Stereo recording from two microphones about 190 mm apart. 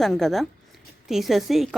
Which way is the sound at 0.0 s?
Centre (ahead or behind).